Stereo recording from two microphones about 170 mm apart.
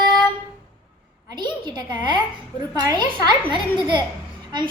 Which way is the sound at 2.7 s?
25° right (ahead or behind).